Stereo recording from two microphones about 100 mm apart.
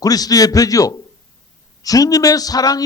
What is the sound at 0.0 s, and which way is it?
A man's voice, 40° left (ahead or behind).